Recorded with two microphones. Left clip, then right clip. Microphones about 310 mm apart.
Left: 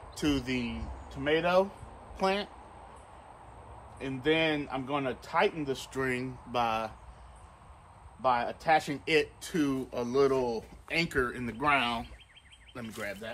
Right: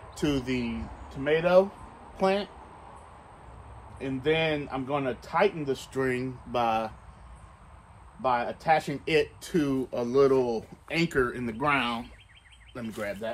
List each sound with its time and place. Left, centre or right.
0.1 s speech: centre
4.0 s speech: centre
8.2 s speech: centre